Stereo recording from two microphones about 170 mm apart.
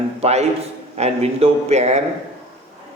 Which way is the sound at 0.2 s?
40° right (ahead or behind).